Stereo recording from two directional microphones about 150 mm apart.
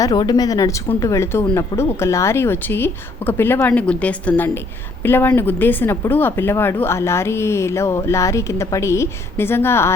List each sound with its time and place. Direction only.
0.0 s a woman's voice: 25° left (ahead or behind)